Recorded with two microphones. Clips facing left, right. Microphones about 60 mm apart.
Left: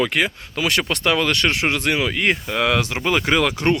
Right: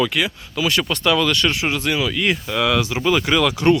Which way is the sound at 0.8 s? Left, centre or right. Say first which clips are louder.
Right 2 dB; left.